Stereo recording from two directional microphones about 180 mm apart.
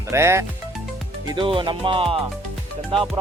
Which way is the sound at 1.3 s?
30° right (ahead or behind).